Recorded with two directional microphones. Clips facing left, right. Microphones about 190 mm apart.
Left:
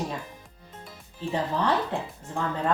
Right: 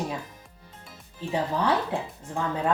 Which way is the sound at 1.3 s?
10° right (ahead or behind).